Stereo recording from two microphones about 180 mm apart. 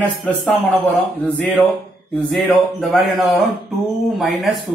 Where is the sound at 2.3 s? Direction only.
Centre (ahead or behind).